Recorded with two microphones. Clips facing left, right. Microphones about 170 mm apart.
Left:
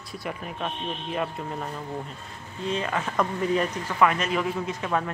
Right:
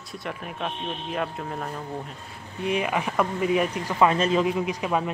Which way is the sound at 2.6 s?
15° right (ahead or behind).